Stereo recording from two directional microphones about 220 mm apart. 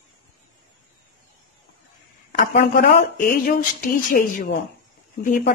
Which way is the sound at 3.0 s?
40° left (ahead or behind).